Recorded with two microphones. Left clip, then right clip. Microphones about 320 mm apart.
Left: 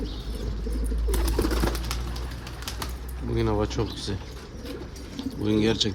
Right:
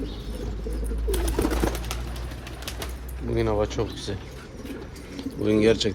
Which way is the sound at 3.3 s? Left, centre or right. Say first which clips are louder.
Right 2 dB; centre.